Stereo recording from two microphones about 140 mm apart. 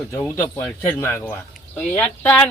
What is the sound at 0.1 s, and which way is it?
Speech, 20° left (ahead or behind).